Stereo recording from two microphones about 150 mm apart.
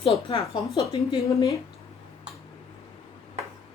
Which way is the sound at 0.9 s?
20° left (ahead or behind).